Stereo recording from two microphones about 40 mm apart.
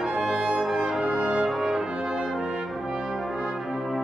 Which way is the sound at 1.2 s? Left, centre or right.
Right.